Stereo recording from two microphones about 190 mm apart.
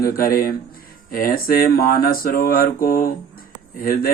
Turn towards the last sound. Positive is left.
turn(degrees=50)  # may be behind; listen again after turning